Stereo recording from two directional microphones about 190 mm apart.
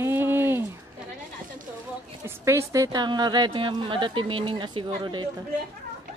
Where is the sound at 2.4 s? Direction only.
15° right (ahead or behind).